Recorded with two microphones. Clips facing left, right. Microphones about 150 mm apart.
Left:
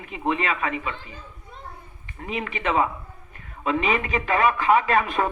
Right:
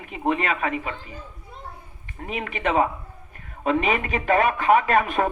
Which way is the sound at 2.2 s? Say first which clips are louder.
Right 1 dB; 50° right (ahead or behind).